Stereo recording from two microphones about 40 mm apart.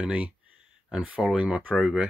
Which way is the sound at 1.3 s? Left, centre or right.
Right.